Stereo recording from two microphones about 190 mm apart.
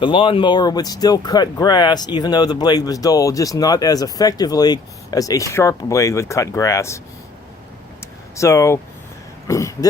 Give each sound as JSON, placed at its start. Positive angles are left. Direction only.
{"t": 0.0, "sound": "speech", "side_deg": 25}
{"t": 8.4, "sound": "speech", "side_deg": 15}